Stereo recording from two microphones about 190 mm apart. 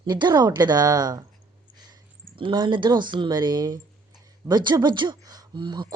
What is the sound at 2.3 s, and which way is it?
Speech, 25° right (ahead or behind).